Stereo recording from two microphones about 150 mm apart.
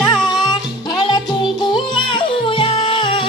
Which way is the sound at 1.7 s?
35° left (ahead or behind).